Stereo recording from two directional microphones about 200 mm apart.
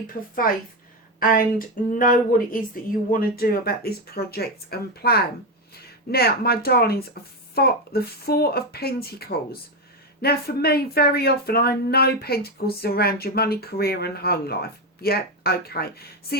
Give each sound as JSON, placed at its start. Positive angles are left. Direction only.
{"t": 1.2, "sound": "speech", "side_deg": 45}